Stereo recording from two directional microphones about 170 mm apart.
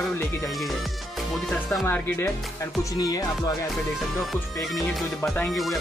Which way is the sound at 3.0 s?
20° left (ahead or behind).